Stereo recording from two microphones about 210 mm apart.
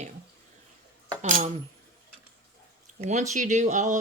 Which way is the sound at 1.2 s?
35° right (ahead or behind).